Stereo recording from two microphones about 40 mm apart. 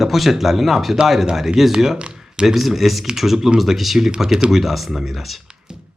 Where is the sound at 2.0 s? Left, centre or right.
Centre.